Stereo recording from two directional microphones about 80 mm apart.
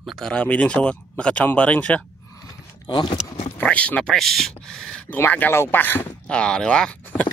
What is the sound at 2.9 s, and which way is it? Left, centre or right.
Speech, left.